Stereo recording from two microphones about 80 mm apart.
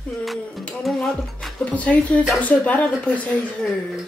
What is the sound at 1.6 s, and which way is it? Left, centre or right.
Speech, centre.